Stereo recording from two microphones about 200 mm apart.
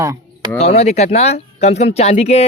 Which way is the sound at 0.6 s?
30° left (ahead or behind).